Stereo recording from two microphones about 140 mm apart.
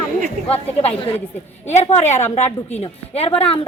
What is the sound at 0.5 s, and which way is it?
Speech, 45° left (ahead or behind).